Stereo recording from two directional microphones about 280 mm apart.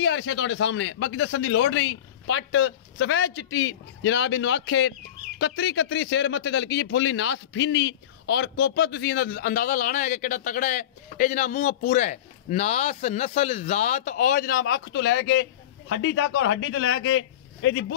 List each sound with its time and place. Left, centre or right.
0.0 s a man's voice: left